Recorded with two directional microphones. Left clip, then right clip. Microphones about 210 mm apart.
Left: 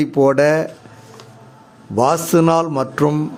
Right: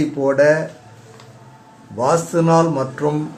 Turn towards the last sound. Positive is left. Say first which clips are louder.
# left 2 dB
turn(degrees=35)  # may be behind; listen again after turning